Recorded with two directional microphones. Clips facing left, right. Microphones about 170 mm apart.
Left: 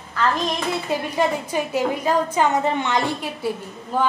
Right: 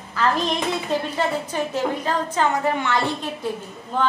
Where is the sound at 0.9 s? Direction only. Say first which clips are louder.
Left 4 dB; 10° left (ahead or behind).